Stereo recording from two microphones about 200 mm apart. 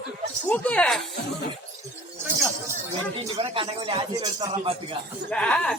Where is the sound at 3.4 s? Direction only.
25° right (ahead or behind).